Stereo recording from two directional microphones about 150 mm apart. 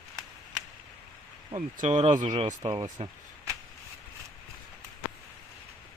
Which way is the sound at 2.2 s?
35° right (ahead or behind).